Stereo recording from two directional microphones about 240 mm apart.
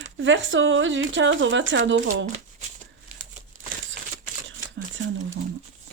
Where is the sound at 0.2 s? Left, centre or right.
Right.